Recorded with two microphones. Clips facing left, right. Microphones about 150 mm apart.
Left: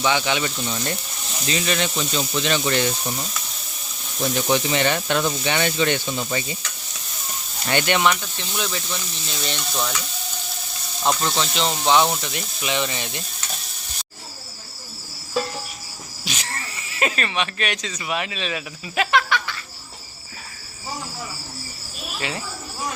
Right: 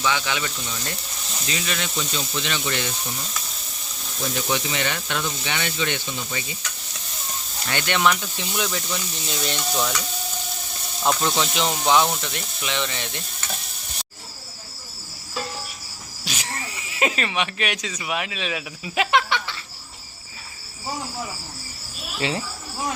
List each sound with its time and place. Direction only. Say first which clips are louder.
0.0 s speech: left 3 dB; 25° left (ahead or behind)
4.4 s speech: left 6 dB; 35° left (ahead or behind)
7.7 s speech: left 4 dB; 20° left (ahead or behind)
8.0 s speech: even; centre (ahead or behind)
11.0 s speech: even; centre (ahead or behind)
11.3 s speech: even; 10° right (ahead or behind)
12.2 s speech: left 2 dB; 5° left (ahead or behind)
16.3 s speech: right 1 dB; 15° right (ahead or behind)
19.1 s insect: left 1 dB; 25° right (ahead or behind)